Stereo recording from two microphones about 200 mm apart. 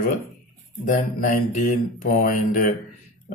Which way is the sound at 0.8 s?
45° left (ahead or behind).